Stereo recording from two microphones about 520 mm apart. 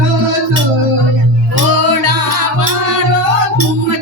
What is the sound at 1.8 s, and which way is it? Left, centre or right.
Music, right.